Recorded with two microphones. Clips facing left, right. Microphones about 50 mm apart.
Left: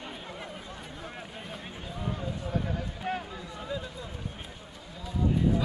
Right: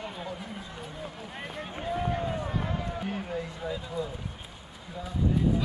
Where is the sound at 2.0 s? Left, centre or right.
Right.